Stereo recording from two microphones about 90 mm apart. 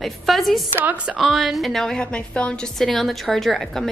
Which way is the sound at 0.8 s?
15° right (ahead or behind).